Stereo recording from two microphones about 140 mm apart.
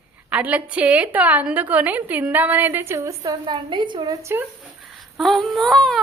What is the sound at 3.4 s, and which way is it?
A woman's voice, 35° right (ahead or behind).